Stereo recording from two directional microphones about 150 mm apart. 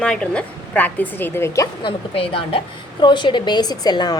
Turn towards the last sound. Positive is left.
turn(degrees=25)  # may be behind; listen again after turning